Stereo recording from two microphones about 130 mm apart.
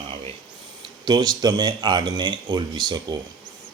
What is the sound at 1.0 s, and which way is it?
Speech, 30° right (ahead or behind).